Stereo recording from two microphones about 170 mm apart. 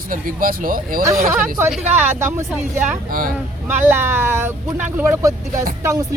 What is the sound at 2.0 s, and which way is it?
Speech, 15° right (ahead or behind).